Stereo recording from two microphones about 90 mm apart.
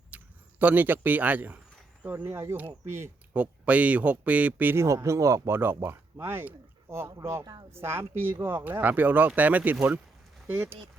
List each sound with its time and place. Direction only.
0.1 s a sound: 15° right (ahead or behind)
0.6 s speech: 20° right (ahead or behind)
3.3 s speech: 15° right (ahead or behind)
4.8 s speech: 30° right (ahead or behind)